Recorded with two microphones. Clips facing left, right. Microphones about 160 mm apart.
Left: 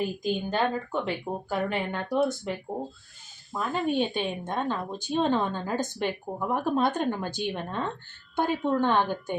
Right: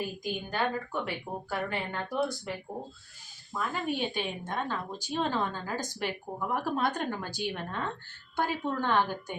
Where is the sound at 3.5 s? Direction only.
25° left (ahead or behind).